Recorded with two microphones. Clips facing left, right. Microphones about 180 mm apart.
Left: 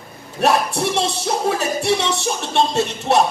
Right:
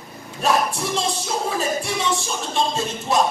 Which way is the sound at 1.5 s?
70° left (ahead or behind).